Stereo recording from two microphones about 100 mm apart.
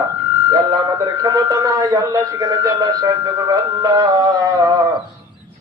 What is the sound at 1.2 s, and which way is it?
Speech, 40° right (ahead or behind).